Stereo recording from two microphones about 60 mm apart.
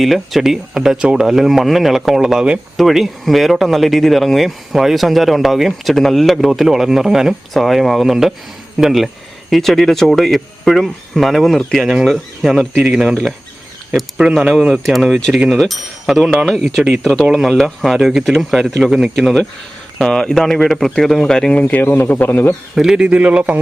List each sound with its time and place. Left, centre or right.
0.0 s speech: centre
2.7 s speech: centre
12.7 s speech: centre
14.7 s speech: centre
20.0 s speech: centre
21.5 s speech: left
22.7 s a man's voice: centre; by 23.6 s right